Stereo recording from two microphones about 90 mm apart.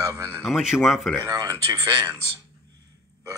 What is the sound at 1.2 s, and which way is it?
Speech, 45° right (ahead or behind).